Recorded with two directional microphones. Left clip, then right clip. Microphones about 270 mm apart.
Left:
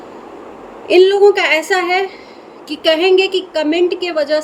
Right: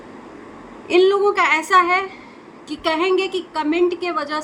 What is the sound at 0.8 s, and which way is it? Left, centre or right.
A woman's voice, centre.